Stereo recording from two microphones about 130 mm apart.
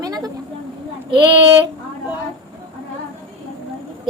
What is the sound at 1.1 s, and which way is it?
Speech, 40° right (ahead or behind).